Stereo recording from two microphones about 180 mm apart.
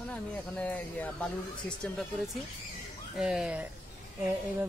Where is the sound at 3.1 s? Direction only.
5° right (ahead or behind).